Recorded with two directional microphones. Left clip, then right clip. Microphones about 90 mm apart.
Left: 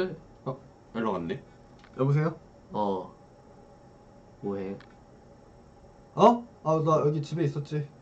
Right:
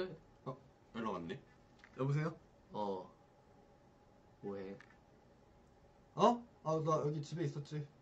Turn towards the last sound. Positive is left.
turn(degrees=-10)  # may be behind; listen again after turning